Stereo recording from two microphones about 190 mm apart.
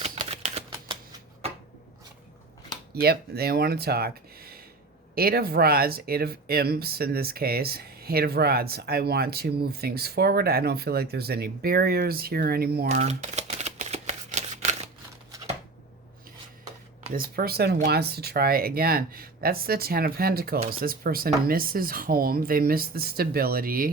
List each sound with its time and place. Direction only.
0.0 s typewriter: 35° right (ahead or behind)
1.4 s shuffling cards: 30° right (ahead or behind)
2.9 s speech: 55° right (ahead or behind)
12.9 s shuffling cards: 40° right (ahead or behind)
17.2 s speech: 55° right (ahead or behind)